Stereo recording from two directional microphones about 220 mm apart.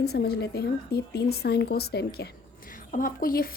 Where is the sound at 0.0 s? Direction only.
45° left (ahead or behind).